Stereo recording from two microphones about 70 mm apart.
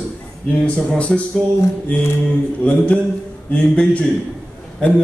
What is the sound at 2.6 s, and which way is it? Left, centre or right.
Speech, left.